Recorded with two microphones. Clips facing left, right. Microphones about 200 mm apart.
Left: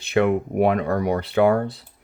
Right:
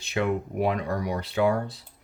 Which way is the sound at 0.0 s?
60° left (ahead or behind).